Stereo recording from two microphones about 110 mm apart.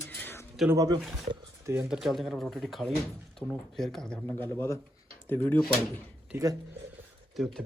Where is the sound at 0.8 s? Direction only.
35° right (ahead or behind).